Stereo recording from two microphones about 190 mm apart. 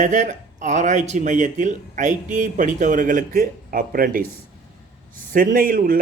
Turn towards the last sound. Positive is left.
turn(degrees=-50)  # may be behind; listen again after turning